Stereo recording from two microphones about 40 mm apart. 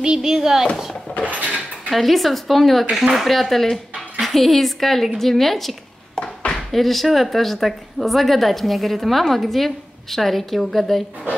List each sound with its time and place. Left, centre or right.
0.0 s a child's voice: centre
1.2 s a sound: right
1.9 s a woman's voice: centre
2.9 s a child's voice: centre
3.3 s a woman's voice: centre
6.1 s a sound: left
6.7 s a woman's voice: centre